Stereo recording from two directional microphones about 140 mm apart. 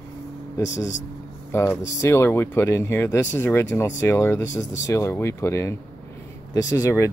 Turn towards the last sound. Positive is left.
turn(degrees=20)  # may be behind; listen again after turning